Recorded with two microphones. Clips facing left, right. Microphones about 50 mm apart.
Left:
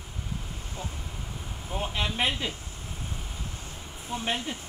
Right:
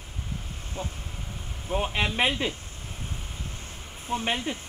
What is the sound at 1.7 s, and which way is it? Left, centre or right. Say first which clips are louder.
Speech: right 4 dB; right.